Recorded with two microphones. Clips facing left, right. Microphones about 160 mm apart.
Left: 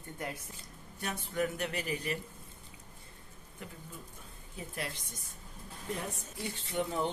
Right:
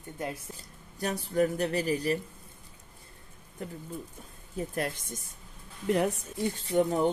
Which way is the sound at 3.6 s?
40° right (ahead or behind).